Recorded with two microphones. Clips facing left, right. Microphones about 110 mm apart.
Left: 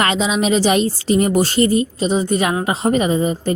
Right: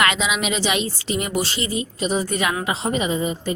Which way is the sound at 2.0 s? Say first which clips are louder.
Left 5 dB; 30° left (ahead or behind).